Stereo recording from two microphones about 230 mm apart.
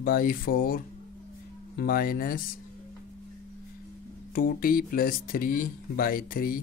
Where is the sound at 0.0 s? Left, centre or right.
Left.